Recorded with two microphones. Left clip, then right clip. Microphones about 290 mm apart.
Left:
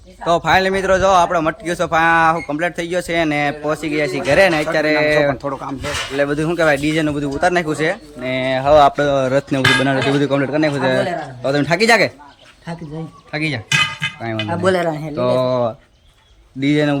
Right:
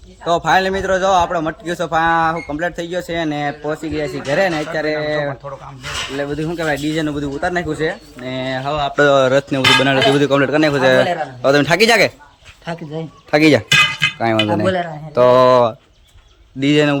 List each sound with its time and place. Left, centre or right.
0.3 s a man's voice: centre
8.6 s speech: centre
9.0 s a man's voice: centre
13.3 s speech: centre
14.2 s a sound: centre
14.6 s speech: centre
15.1 s a man's voice: centre